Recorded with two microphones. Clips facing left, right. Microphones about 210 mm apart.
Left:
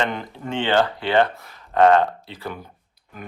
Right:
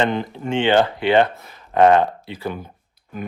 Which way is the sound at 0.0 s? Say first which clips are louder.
Right 5 dB; 25° right (ahead or behind).